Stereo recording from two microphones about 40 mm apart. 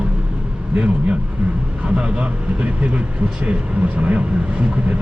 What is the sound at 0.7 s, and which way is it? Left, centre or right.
Speech, right.